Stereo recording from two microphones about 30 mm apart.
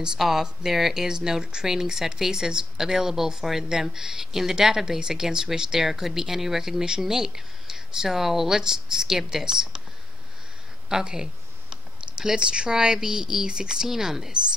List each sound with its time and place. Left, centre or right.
0.2 s speech: centre
1.0 s speech: right
10.9 s speech: right
11.7 s typing: right
12.7 s speech: right
13.8 s speech: centre